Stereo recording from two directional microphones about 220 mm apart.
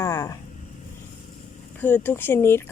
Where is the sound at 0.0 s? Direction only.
15° left (ahead or behind).